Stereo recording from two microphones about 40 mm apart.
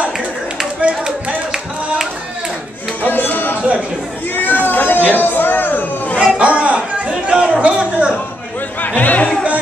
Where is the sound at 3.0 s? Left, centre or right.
Left.